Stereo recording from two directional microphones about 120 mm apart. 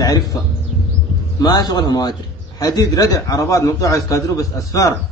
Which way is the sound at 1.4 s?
30° left (ahead or behind).